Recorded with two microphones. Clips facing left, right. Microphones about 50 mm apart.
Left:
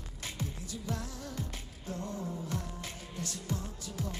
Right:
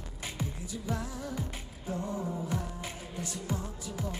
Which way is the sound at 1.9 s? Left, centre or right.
Centre.